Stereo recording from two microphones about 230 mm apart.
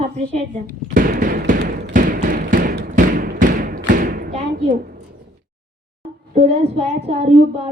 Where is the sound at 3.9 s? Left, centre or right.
Right.